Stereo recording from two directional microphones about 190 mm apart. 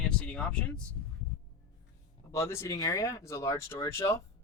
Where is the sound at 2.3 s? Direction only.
15° left (ahead or behind).